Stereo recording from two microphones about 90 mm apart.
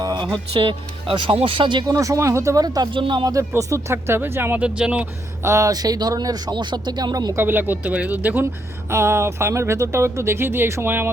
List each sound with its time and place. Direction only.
0.0 s a sound: 50° right (ahead or behind)
0.5 s speech: 80° right
1.8 s speech: 40° right (ahead or behind)
2.9 s speech: 70° right (ahead or behind)
3.6 s speech: 35° right (ahead or behind); by 5.0 s 15° right (ahead or behind)
5.4 s speech: 35° right (ahead or behind)
7.3 s speech: 25° right (ahead or behind)